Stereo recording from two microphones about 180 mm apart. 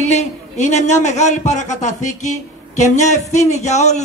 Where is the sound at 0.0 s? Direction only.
40° left (ahead or behind).